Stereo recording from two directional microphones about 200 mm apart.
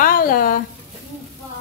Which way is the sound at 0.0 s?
45° left (ahead or behind).